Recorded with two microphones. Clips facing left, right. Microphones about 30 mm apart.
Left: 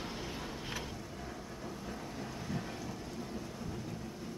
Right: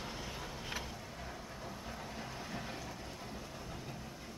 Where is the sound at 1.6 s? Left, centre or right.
Centre.